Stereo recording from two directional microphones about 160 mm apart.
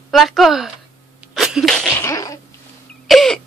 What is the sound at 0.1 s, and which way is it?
Speech, centre (ahead or behind).